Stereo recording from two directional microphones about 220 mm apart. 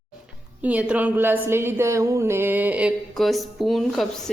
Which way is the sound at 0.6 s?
5° right (ahead or behind).